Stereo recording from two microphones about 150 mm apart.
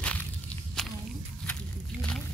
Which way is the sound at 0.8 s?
5° left (ahead or behind).